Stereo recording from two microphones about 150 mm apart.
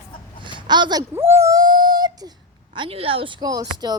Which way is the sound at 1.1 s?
15° right (ahead or behind).